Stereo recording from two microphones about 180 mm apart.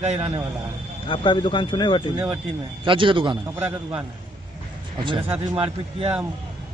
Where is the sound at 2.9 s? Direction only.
30° right (ahead or behind).